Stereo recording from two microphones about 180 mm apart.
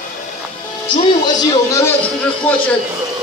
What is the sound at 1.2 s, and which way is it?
Speech, 20° left (ahead or behind).